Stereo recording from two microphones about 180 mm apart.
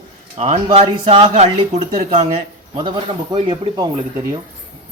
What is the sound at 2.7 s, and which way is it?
A man's voice, 25° right (ahead or behind).